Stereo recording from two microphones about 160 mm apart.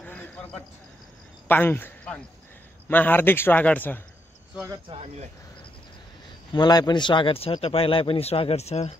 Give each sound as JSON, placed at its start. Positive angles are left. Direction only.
{"t": 0.0, "sound": "a sound", "side_deg": 10}
{"t": 1.5, "sound": "speech", "side_deg": 10}
{"t": 4.8, "sound": "speech", "side_deg": -35}
{"t": 6.5, "sound": "speech", "side_deg": 25}